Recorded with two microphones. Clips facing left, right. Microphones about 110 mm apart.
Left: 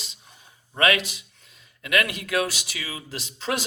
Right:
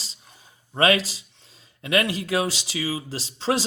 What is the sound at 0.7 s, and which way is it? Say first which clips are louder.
Speech: right 2 dB; 30° right (ahead or behind).